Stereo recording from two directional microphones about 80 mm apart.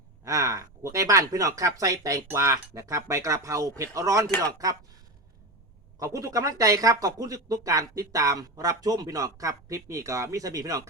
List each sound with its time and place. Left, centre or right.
0.3 s speech: right
6.0 s speech: right